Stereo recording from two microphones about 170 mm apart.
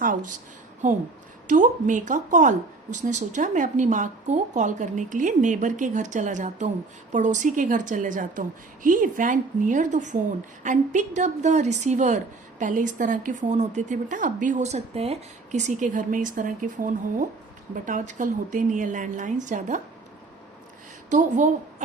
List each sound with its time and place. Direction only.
0.0 s a woman's voice: 50° right (ahead or behind)
21.1 s a woman's voice: 45° right (ahead or behind)